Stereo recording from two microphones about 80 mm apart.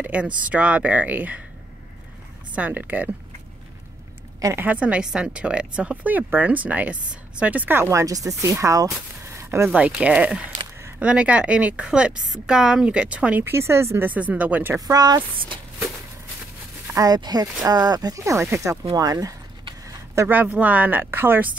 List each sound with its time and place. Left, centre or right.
0.0 s speech: centre
2.5 s speech: right
4.6 s a woman's voice: centre
7.8 s speech: right
9.8 s a woman's voice: centre
13.4 s speech: right
14.0 s speech: centre
14.9 s speech: right
16.9 s speech: right
20.2 s speech: right